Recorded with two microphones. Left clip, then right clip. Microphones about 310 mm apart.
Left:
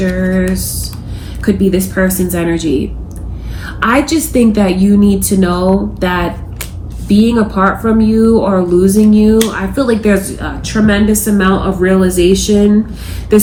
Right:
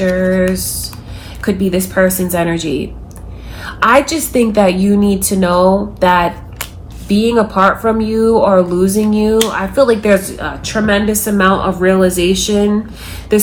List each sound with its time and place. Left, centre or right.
0.0 s speech: right